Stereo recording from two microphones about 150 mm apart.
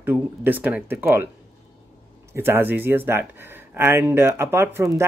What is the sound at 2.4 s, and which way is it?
Speech, 15° right (ahead or behind).